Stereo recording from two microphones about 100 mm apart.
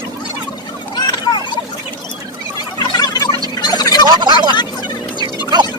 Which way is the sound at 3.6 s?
45° left (ahead or behind).